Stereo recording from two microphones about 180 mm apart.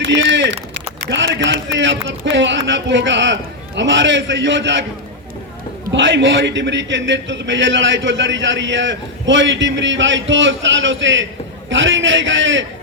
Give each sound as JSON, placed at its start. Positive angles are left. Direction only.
{"t": 0.0, "sound": "speech", "side_deg": -80}
{"t": 1.1, "sound": "a man's voice", "side_deg": -90}
{"t": 5.9, "sound": "a man's voice", "side_deg": -85}